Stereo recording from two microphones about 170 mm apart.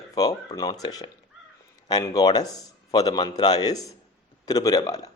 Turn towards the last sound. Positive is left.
turn(degrees=20)  # may be behind; listen again after turning